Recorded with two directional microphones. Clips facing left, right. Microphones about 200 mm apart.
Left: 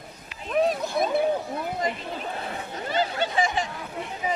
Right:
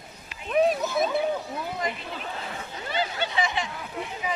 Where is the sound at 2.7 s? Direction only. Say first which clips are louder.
Left 3 dB; 40° left (ahead or behind).